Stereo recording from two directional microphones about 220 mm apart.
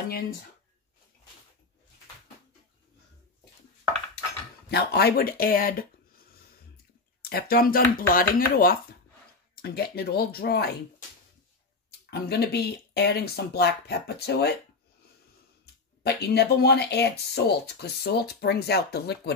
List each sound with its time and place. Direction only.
4.6 s speech: 45° left (ahead or behind)
12.1 s speech: 50° left (ahead or behind)
15.6 s speech: 45° left (ahead or behind)